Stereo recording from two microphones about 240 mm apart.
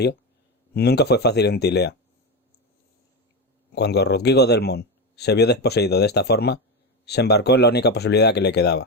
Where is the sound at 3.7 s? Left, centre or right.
Left.